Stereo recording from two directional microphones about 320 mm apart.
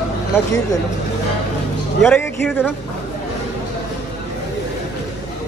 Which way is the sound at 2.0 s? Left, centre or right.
Centre.